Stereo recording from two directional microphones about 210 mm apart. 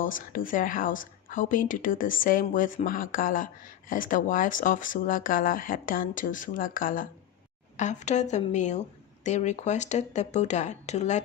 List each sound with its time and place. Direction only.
0.0 s speech: 40° left (ahead or behind)